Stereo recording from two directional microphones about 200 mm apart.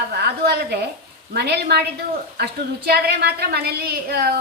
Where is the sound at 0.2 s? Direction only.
55° right (ahead or behind).